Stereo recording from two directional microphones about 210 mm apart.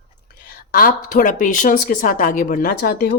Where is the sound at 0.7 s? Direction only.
40° left (ahead or behind).